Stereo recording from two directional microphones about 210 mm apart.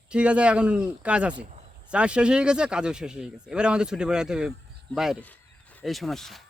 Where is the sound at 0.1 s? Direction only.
5° right (ahead or behind).